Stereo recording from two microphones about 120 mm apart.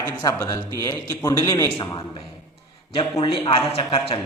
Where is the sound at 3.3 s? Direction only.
45° left (ahead or behind).